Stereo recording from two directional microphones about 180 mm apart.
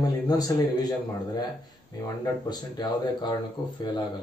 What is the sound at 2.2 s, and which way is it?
A man's voice, 25° left (ahead or behind).